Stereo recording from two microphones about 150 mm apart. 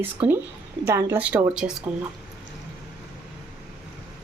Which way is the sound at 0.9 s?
15° right (ahead or behind).